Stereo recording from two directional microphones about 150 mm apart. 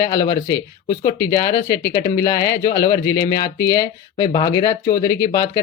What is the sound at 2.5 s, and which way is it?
Speech, 90° left.